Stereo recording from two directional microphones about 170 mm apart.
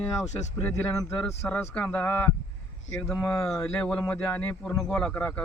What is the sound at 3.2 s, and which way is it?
A man's voice, 10° left (ahead or behind).